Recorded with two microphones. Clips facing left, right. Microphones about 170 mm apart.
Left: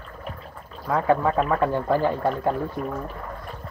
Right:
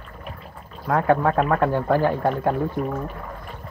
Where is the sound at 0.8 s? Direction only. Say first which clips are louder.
Right 2 dB; centre (ahead or behind).